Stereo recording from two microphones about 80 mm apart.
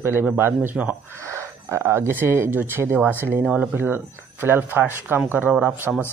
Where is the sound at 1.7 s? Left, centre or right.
Right.